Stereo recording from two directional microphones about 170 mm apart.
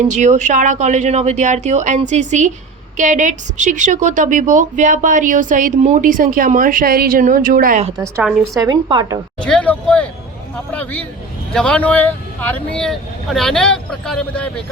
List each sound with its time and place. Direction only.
0.0 s a woman's voice: 45° right (ahead or behind)
8.5 s speech: 25° right (ahead or behind)
9.4 s speech: 5° left (ahead or behind)
10.7 s a sound: 10° left (ahead or behind)
11.5 s speech: 5° left (ahead or behind)